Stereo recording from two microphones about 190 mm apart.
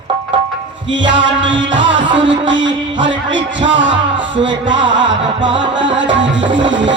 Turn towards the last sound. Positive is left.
turn(degrees=-75)  # may be behind; listen again after turning